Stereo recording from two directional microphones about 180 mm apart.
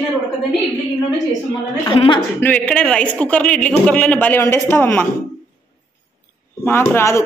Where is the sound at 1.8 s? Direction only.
25° left (ahead or behind).